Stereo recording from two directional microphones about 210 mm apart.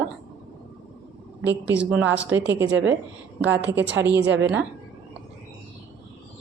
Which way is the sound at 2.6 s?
60° right (ahead or behind).